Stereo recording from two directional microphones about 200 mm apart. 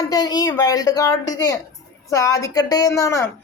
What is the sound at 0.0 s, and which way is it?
Speech, 20° left (ahead or behind).